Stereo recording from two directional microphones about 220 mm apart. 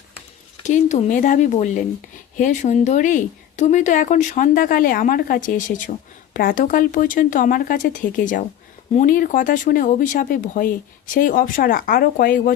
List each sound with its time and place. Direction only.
0.6 s speech: 35° left (ahead or behind)